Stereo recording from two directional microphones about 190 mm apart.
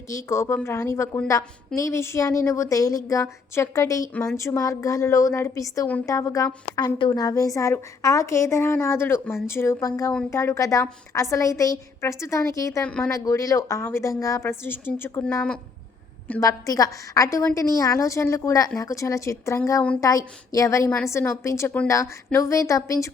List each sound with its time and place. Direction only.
0.1 s a woman's voice: 15° left (ahead or behind)
13.1 s a woman's voice: 15° left (ahead or behind)